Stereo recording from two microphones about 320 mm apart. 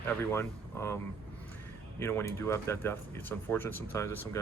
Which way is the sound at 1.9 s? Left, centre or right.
Centre.